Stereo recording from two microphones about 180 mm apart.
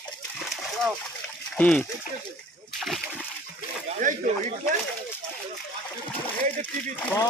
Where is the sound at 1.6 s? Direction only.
5° left (ahead or behind).